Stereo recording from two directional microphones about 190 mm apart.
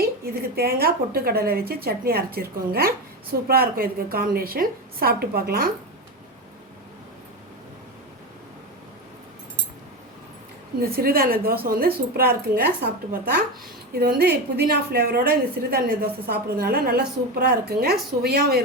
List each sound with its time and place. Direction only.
0.5 s a woman's voice: 55° right (ahead or behind)
10.8 s a woman's voice: 50° right (ahead or behind)